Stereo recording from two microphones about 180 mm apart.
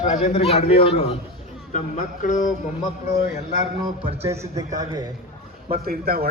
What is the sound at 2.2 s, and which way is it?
Speech, 45° left (ahead or behind).